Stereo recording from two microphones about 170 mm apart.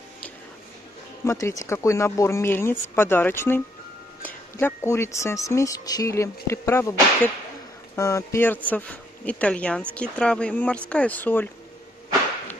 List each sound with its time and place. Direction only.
1.2 s speech: 15° left (ahead or behind)